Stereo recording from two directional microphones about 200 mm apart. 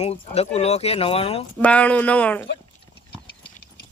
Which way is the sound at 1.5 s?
5° left (ahead or behind).